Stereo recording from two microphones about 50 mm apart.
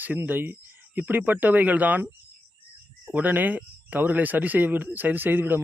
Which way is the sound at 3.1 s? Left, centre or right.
Right.